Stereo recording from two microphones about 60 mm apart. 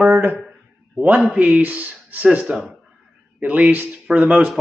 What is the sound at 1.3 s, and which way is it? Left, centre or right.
Speech, right.